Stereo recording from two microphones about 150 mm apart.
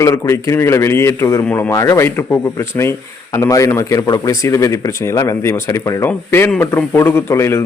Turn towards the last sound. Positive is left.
turn(degrees=15)  # may be behind; listen again after turning